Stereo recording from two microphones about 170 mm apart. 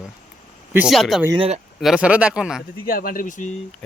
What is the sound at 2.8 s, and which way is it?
Speech, 60° left (ahead or behind).